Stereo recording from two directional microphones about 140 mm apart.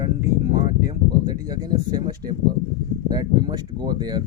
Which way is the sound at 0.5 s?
30° right (ahead or behind).